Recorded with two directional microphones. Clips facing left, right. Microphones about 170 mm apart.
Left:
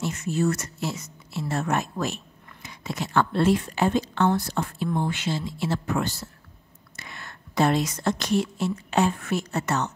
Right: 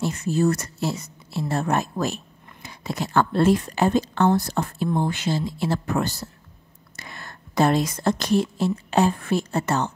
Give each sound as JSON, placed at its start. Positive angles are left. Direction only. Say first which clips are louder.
{"t": 0.0, "sound": "a woman's voice", "louder": "right 3 dB", "side_deg": -35}